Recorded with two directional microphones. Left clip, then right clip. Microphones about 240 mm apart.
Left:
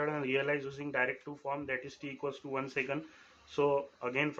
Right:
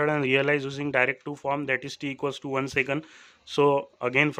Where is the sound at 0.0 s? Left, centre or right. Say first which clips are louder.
Right 9 dB; right.